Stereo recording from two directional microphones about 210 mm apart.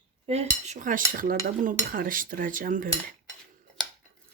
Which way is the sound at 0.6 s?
35° right (ahead or behind).